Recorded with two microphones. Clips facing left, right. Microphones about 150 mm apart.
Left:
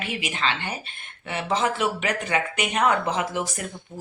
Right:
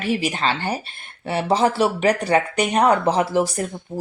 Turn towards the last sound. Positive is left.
turn(degrees=-35)  # may be behind; listen again after turning